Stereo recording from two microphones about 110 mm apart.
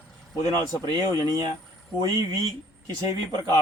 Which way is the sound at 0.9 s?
40° right (ahead or behind).